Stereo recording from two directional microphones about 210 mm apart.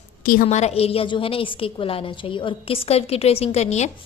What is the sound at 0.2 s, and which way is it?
Speech, 45° left (ahead or behind).